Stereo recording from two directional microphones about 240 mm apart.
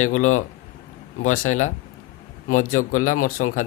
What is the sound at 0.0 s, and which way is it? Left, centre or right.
Speech, left.